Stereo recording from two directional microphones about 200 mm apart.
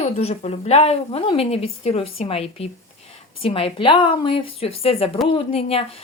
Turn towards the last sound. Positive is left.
turn(degrees=30)  # may be behind; listen again after turning